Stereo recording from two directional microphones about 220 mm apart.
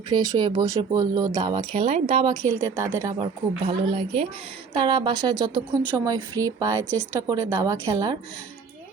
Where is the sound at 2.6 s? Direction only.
10° right (ahead or behind).